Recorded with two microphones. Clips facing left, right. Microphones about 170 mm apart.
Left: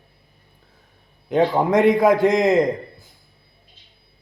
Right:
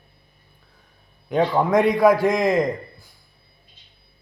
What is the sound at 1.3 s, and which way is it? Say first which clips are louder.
Speech: left 2 dB; 20° left (ahead or behind).